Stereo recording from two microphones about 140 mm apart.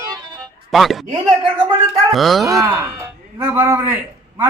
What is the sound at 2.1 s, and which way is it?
Speech, centre (ahead or behind).